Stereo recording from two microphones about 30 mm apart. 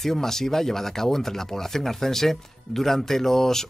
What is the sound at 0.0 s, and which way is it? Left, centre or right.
Speech, centre.